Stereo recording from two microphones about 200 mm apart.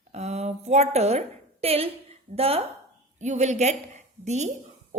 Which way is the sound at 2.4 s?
30° right (ahead or behind).